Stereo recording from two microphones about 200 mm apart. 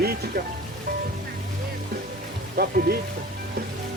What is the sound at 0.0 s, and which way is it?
Speech, 50° right (ahead or behind).